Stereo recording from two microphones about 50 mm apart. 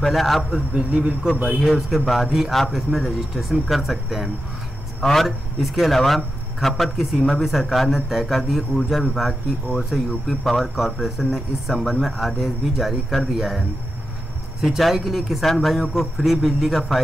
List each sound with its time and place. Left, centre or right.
0.0 s a man's voice: centre
0.7 s a man's voice: centre
1.6 s a man's voice: centre
14.6 s a man's voice: centre